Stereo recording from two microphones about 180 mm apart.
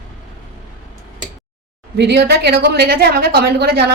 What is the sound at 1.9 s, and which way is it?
A woman's voice, 70° right (ahead or behind).